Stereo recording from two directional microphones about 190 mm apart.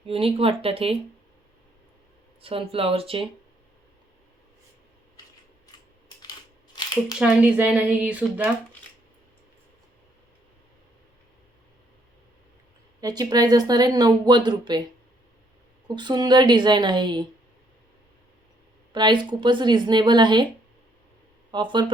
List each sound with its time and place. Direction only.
0.0 s speech: 30° right (ahead or behind)
2.4 s speech: 30° right (ahead or behind)
6.7 s a sound: 20° left (ahead or behind)
7.2 s a woman's voice: 5° right (ahead or behind)
13.0 s speech: 20° right (ahead or behind)
15.9 s speech: 25° right (ahead or behind)
18.9 s speech: 25° right (ahead or behind)
21.5 s speech: 25° right (ahead or behind)